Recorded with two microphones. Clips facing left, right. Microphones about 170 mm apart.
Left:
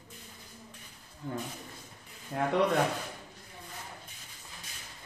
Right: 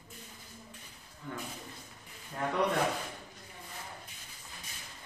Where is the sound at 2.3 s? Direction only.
65° left (ahead or behind).